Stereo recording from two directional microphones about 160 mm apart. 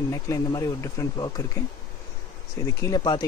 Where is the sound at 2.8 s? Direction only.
25° left (ahead or behind).